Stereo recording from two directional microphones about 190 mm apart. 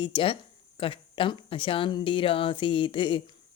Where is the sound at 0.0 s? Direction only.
25° left (ahead or behind).